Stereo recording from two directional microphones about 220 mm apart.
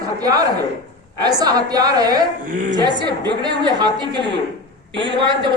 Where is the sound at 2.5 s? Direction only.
35° right (ahead or behind).